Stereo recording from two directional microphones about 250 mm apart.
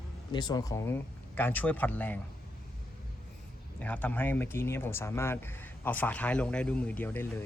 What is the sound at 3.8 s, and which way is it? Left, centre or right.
Speech, centre.